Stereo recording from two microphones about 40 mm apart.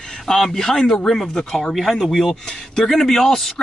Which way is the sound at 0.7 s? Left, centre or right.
Left.